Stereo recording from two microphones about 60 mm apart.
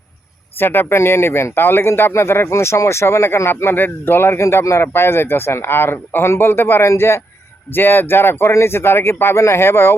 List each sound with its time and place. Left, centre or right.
0.6 s speech: left
7.7 s speech: left